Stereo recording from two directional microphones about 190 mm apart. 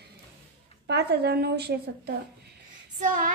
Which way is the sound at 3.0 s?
45° right (ahead or behind).